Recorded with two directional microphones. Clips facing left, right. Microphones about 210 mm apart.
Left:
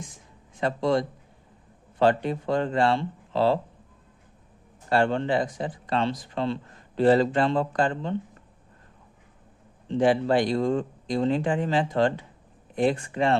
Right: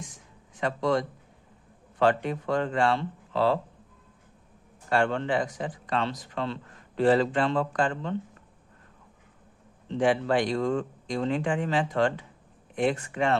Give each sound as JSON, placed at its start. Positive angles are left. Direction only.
{"t": 0.6, "sound": "speech", "side_deg": 30}
{"t": 4.9, "sound": "speech", "side_deg": 30}
{"t": 10.0, "sound": "speech", "side_deg": 35}